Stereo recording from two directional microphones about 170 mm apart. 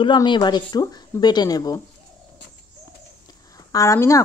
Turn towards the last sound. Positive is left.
turn(degrees=20)  # may be behind; listen again after turning